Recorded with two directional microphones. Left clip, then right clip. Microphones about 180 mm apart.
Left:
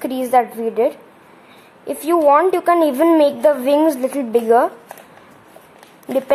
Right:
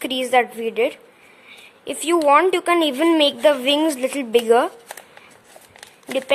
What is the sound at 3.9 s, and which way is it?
Speech, 35° right (ahead or behind).